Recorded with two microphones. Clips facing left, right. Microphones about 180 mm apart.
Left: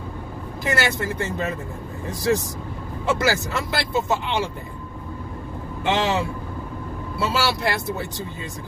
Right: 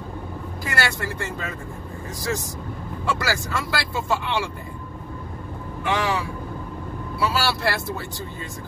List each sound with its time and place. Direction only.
0.7 s speech: 20° left (ahead or behind)
5.9 s speech: 25° left (ahead or behind)